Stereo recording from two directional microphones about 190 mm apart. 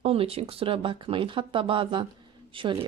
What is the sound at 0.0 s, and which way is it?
Speech, 30° right (ahead or behind).